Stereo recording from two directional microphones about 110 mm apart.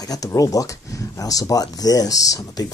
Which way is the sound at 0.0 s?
35° left (ahead or behind).